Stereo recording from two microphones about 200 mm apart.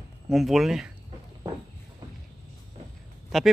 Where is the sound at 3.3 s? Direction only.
Centre (ahead or behind).